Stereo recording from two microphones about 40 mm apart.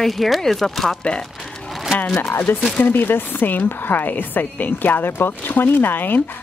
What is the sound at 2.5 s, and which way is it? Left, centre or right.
Speech, left.